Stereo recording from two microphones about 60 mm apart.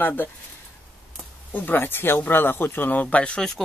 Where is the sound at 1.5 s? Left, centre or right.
Left.